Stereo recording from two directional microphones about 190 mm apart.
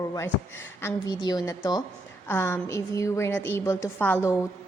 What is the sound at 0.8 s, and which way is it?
A woman's voice, 15° left (ahead or behind).